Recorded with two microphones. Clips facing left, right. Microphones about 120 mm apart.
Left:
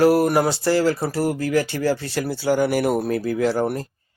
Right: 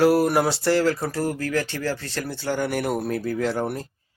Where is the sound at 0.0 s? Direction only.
Centre (ahead or behind).